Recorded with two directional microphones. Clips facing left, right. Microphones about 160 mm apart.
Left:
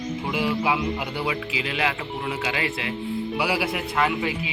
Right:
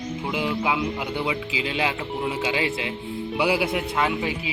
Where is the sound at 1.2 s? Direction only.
25° right (ahead or behind).